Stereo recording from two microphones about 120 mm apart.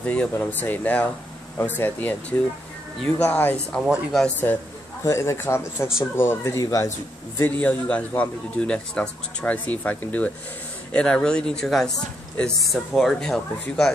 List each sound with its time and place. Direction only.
0.0 s a man's voice: 10° left (ahead or behind)
3.8 s speech: 5° right (ahead or behind)
4.4 s a man's voice: 15° left (ahead or behind)
7.3 s a man's voice: 15° left (ahead or behind)